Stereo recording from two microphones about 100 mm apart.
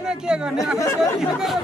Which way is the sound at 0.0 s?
5° right (ahead or behind).